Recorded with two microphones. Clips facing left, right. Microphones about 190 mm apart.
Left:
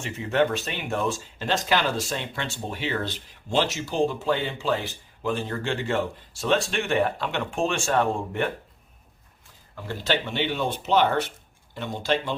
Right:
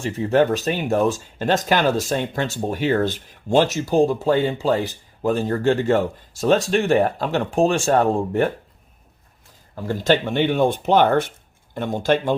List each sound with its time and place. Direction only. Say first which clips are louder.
0.0 s speech: right 6 dB; 40° right (ahead or behind)
9.7 s speech: right 8 dB; 45° right (ahead or behind)